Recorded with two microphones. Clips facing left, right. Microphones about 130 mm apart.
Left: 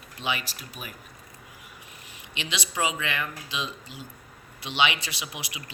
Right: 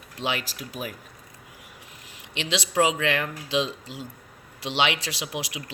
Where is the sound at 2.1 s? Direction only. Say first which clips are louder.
Right 6 dB; 90° right.